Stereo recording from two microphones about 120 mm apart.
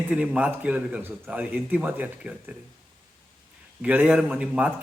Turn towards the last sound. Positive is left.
turn(degrees=-10)  # may be behind; listen again after turning